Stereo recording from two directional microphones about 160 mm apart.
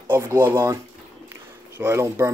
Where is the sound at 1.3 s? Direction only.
15° right (ahead or behind).